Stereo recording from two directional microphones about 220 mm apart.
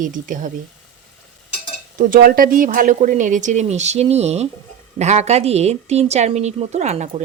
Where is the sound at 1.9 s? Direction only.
40° right (ahead or behind).